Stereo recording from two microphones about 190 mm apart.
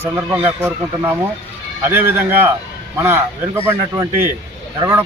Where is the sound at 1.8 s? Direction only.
10° right (ahead or behind).